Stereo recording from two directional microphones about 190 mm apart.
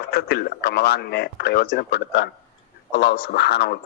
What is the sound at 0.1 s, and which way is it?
A man's voice, 55° left (ahead or behind).